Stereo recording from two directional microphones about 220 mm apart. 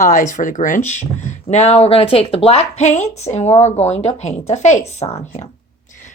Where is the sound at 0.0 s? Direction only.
35° left (ahead or behind).